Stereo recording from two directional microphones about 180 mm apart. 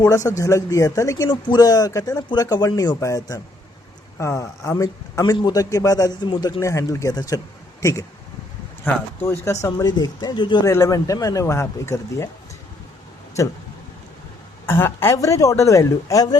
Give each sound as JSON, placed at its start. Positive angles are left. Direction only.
{"t": 0.0, "sound": "a man's voice", "side_deg": 20}
{"t": 13.4, "sound": "speech", "side_deg": 15}
{"t": 14.7, "sound": "speech", "side_deg": 15}